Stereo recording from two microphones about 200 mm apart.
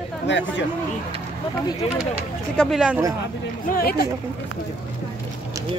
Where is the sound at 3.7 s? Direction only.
50° left (ahead or behind).